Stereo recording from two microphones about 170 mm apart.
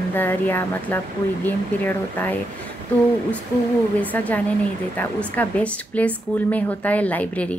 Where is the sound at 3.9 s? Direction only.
10° left (ahead or behind).